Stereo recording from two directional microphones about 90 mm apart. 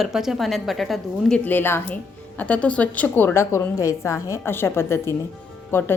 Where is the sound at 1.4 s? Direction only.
25° left (ahead or behind).